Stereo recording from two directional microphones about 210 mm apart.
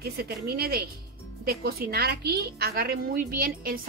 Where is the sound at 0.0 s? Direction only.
50° right (ahead or behind).